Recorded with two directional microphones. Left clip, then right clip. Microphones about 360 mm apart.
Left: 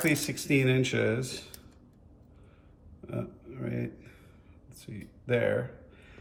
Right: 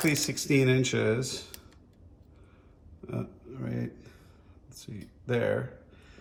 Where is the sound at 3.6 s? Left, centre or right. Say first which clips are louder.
Left 1 dB; centre.